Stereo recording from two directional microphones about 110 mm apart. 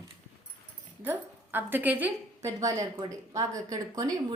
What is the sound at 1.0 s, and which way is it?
A woman's voice, 20° right (ahead or behind).